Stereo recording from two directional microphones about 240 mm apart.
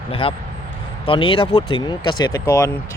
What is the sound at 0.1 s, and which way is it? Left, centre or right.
Speech, left.